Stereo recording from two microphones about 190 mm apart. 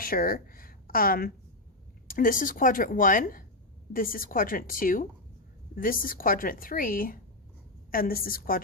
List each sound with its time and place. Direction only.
0.0 s a woman's voice: 50° left (ahead or behind)